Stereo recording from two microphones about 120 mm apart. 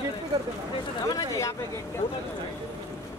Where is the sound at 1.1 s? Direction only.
25° left (ahead or behind).